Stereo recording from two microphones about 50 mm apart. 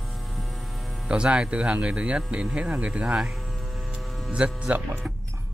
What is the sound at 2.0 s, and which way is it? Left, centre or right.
Speech, right.